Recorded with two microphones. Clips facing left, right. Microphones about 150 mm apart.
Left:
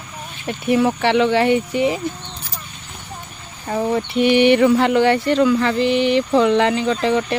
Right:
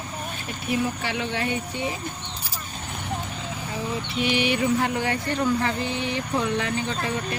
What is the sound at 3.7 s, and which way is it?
Speech, 60° left (ahead or behind).